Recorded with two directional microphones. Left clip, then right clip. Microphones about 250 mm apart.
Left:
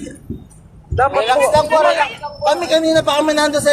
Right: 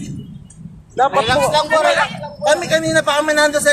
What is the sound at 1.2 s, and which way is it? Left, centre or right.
Speech, centre.